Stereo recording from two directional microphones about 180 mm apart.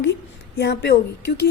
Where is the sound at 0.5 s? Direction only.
70° left (ahead or behind).